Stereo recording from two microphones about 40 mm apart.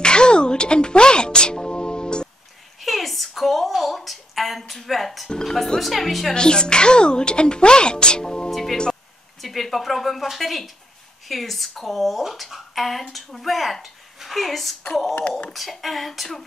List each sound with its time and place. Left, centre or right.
0.0 s music: left
2.8 s a woman's voice: centre
6.3 s a woman's voice: left
8.5 s music: centre
9.4 s speech: centre